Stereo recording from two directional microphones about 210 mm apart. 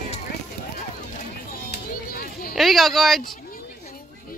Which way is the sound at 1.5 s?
45° left (ahead or behind).